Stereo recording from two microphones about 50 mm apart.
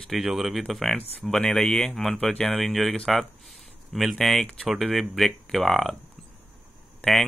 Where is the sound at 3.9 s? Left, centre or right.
Centre.